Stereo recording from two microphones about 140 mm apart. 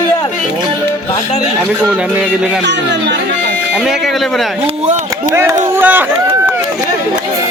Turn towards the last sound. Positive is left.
turn(degrees=-15)  # may be behind; listen again after turning